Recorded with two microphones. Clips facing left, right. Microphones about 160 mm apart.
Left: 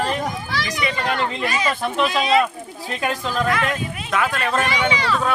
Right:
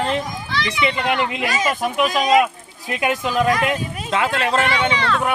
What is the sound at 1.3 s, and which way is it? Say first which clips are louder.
Speech: right 1 dB; 90° right.